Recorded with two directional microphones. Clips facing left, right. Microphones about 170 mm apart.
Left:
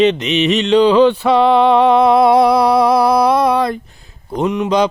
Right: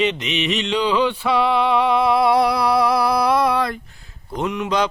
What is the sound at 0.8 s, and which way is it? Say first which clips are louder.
Speech: left 9 dB; 25° left (ahead or behind).